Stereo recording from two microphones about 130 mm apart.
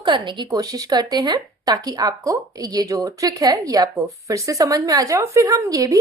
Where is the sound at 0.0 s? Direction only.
35° right (ahead or behind).